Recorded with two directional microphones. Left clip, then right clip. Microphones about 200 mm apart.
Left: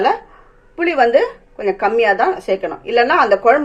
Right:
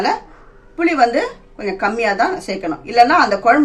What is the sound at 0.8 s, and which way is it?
A woman's voice, 35° left (ahead or behind).